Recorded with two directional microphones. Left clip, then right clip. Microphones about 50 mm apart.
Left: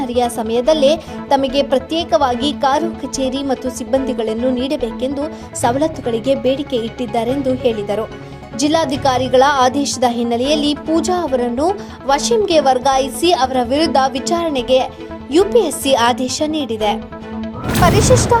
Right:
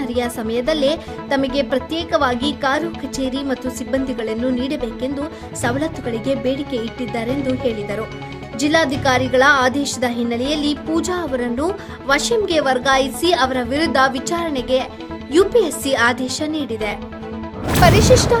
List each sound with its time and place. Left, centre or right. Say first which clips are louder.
0.1 s speech: left 6 dB; left
3.6 s a woman's voice: left 3 dB; left
3.9 s speech: left 5 dB; left
5.6 s speech: left 5 dB; left
10.9 s a woman's voice: left 6 dB; left
17.8 s speech: even; centre